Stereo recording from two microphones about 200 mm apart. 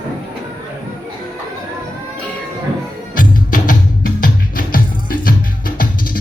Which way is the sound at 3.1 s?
45° left (ahead or behind).